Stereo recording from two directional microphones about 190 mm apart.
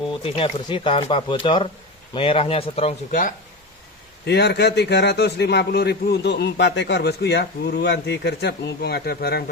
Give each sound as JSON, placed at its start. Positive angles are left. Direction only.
{"t": 0.2, "sound": "speech", "side_deg": 30}
{"t": 3.1, "sound": "speech", "side_deg": 45}
{"t": 4.3, "sound": "a man's voice", "side_deg": 60}